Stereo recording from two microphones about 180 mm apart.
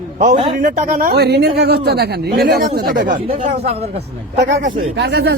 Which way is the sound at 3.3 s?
35° right (ahead or behind).